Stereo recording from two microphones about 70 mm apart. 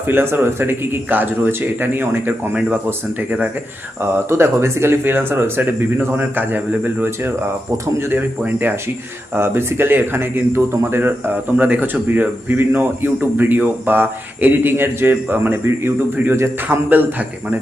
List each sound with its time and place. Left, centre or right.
0.1 s speech: right
2.5 s a man's voice: centre
4.3 s a man's voice: right